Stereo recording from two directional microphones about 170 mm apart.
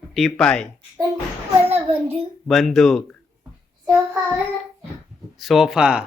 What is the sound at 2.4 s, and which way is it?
Speech, centre (ahead or behind).